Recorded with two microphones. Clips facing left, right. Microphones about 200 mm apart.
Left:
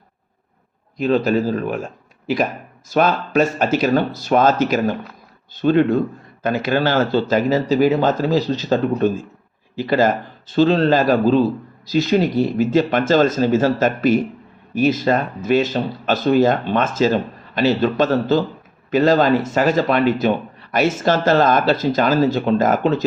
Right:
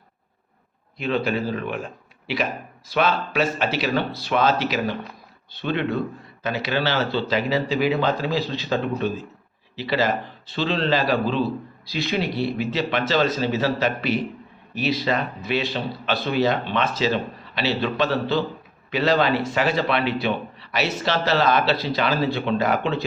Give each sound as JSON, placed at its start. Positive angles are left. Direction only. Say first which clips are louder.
{"t": 0.9, "sound": "speech", "louder": "left 7 dB", "side_deg": 40}